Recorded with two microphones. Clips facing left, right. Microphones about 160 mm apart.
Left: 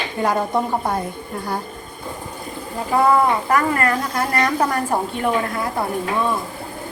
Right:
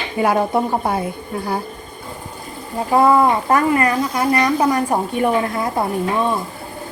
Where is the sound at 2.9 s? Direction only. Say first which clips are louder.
Right 3 dB; 20° right (ahead or behind).